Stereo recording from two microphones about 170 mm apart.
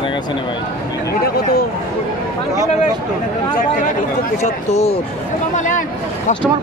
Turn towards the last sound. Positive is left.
turn(degrees=45)  # may be behind; listen again after turning